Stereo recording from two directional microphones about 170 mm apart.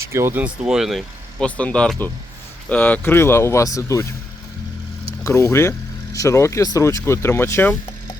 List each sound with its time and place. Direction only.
0.0 s speech: 15° right (ahead or behind); by 4.0 s 20° left (ahead or behind)
5.2 s speech: 15° left (ahead or behind)